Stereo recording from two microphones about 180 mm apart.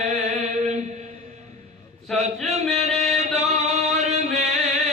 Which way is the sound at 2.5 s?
40° right (ahead or behind).